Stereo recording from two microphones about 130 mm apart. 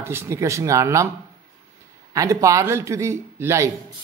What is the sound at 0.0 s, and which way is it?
Speech, 20° right (ahead or behind).